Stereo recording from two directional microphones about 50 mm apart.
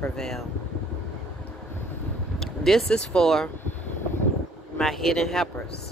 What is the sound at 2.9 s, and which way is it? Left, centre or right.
Speech, centre.